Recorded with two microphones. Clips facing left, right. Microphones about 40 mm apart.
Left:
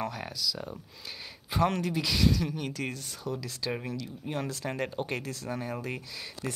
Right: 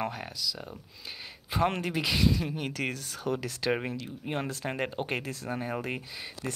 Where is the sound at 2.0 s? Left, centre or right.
Right.